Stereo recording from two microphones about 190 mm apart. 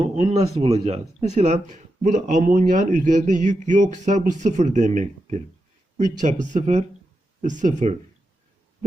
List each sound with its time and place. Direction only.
0.0 s speech: 35° right (ahead or behind)